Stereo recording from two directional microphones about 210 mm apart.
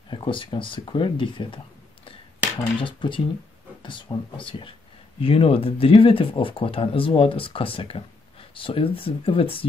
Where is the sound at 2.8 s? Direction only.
25° left (ahead or behind).